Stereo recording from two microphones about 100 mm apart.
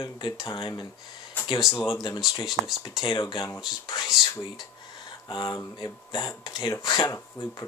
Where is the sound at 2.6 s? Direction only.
15° right (ahead or behind).